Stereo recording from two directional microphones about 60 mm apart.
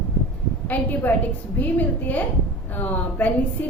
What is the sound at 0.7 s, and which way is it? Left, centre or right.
A woman's voice, left.